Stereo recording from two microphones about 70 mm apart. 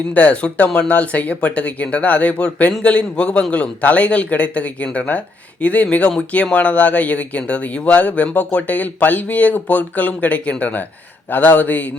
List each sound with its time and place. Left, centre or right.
0.1 s a man's voice: left